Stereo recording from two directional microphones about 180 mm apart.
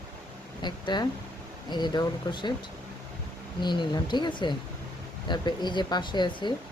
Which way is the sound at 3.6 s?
25° left (ahead or behind).